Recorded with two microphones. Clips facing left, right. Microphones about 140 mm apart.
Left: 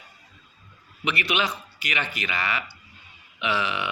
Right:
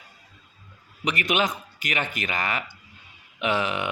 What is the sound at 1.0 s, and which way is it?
Speech, 45° right (ahead or behind).